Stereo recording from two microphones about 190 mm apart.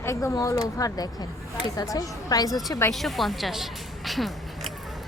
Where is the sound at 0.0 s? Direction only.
15° left (ahead or behind).